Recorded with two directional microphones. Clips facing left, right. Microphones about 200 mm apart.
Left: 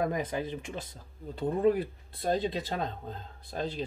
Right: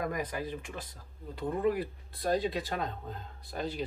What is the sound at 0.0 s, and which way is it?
Speech, 25° left (ahead or behind).